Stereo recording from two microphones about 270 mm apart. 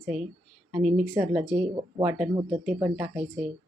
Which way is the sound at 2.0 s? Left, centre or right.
Centre.